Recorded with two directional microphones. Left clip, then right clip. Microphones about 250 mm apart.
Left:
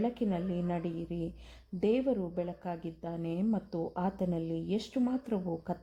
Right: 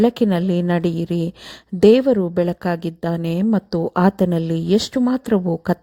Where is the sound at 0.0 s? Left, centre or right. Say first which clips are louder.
Right 16 dB; right.